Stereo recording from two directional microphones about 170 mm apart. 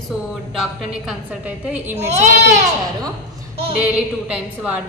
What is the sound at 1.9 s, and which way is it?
A woman's voice, 40° right (ahead or behind).